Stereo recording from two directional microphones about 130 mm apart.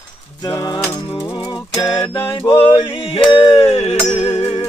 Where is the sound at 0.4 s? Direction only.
30° left (ahead or behind).